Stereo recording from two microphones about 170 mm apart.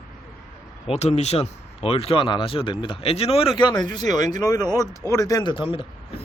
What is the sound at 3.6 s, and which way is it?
Speech, 25° left (ahead or behind).